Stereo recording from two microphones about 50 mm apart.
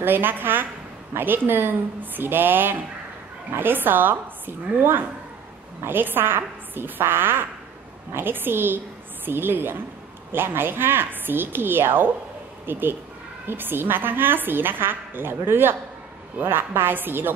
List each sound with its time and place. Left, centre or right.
0.0 s a woman's voice: right